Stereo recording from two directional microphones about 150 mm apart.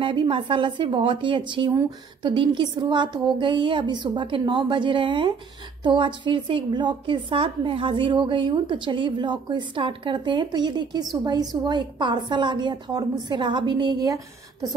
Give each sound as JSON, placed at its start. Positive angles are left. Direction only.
{"t": 0.0, "sound": "a woman's voice", "side_deg": -35}